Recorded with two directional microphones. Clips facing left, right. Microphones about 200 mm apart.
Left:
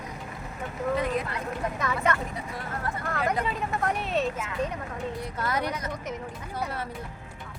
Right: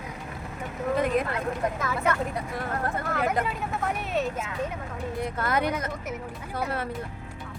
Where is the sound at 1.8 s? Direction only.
5° right (ahead or behind).